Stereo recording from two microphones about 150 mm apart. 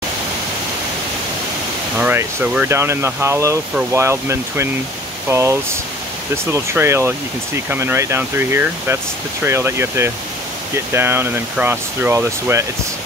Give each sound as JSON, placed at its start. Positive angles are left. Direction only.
{"t": 2.0, "sound": "speech", "side_deg": -10}